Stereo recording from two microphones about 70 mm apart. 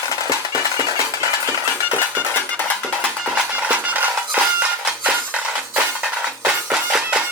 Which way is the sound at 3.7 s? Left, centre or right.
Right.